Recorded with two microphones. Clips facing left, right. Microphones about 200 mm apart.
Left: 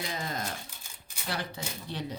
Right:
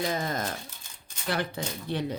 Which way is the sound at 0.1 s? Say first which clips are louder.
Right 5 dB; 50° right (ahead or behind).